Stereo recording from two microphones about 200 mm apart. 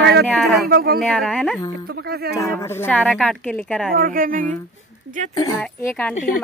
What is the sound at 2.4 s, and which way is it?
A woman's voice, 15° left (ahead or behind).